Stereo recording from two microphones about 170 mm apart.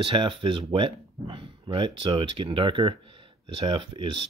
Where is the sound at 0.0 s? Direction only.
30° right (ahead or behind).